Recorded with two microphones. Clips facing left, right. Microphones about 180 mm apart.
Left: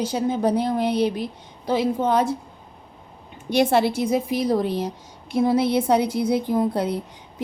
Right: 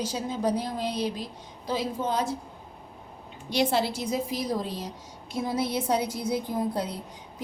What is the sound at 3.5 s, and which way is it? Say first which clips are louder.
A woman's voice: left 7 dB; 55° left (ahead or behind).